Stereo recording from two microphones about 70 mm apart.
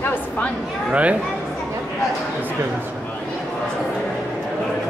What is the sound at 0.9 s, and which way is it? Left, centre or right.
Speech, centre.